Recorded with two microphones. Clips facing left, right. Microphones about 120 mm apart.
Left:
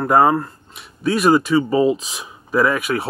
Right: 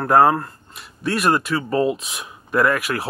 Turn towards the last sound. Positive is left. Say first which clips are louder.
# left 1 dB
turn(degrees=0)  # may be behind; listen again after turning